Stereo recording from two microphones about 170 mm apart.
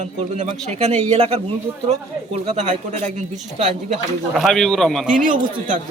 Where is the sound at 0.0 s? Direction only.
45° right (ahead or behind).